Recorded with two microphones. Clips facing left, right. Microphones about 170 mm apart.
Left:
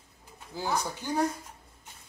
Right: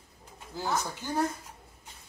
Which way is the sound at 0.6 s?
10° left (ahead or behind).